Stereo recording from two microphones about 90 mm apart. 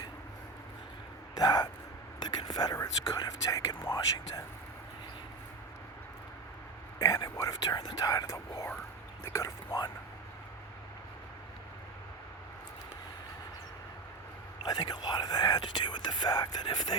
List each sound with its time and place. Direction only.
1.4 s speech: 45° left (ahead or behind)
7.0 s speech: 40° left (ahead or behind)
14.6 s speech: 50° left (ahead or behind)